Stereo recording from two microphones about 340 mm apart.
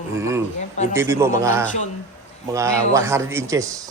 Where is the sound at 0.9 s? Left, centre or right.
Centre.